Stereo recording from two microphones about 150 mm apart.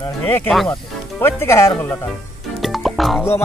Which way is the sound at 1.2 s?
15° left (ahead or behind).